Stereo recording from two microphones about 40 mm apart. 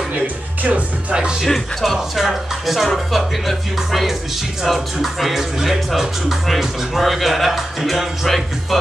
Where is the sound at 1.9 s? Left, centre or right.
Centre.